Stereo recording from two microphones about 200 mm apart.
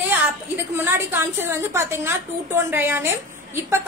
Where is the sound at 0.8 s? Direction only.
10° right (ahead or behind).